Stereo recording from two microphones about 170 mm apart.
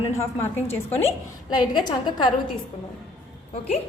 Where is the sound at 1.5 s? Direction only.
25° left (ahead or behind).